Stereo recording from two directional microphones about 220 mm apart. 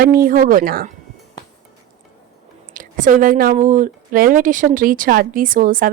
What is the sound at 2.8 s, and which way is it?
A woman's voice, 35° right (ahead or behind).